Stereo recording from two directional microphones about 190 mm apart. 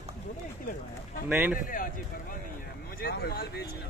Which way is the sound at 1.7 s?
45° left (ahead or behind).